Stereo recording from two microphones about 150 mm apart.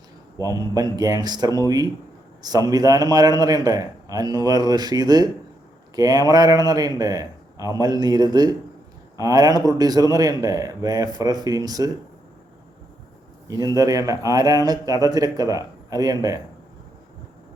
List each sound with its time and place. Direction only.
0.7 s speech: 25° right (ahead or behind)
13.5 s speech: 25° right (ahead or behind)